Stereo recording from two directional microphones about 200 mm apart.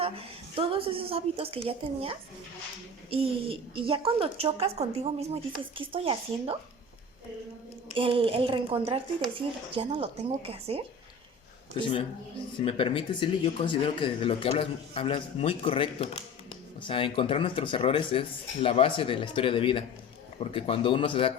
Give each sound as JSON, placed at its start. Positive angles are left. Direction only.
{"t": 0.0, "sound": "a woman's voice", "side_deg": -30}
{"t": 7.9, "sound": "a woman's voice", "side_deg": -25}
{"t": 11.8, "sound": "speech", "side_deg": 25}